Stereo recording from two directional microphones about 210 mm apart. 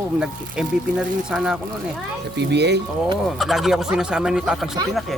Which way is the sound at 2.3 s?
55° right (ahead or behind).